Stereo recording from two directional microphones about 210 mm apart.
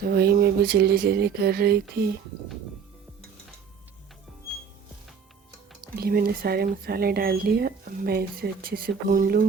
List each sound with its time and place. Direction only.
0.1 s speech: 45° right (ahead or behind)
6.0 s speech: 45° right (ahead or behind)